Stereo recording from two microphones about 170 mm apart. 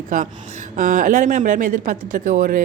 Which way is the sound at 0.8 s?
50° right (ahead or behind).